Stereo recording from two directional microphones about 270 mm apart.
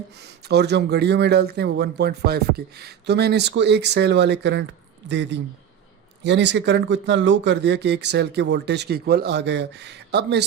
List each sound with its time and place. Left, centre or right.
0.2 s speech: right